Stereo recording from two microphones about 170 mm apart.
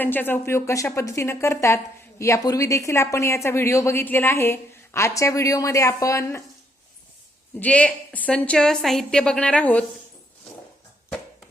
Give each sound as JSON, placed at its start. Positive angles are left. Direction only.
{"t": 0.0, "sound": "speech", "side_deg": 10}
{"t": 7.6, "sound": "a woman's voice", "side_deg": 5}